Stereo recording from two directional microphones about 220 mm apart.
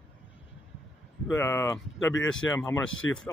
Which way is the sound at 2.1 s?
60° left (ahead or behind).